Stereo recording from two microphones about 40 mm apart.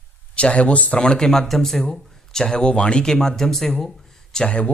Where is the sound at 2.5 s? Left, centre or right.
Left.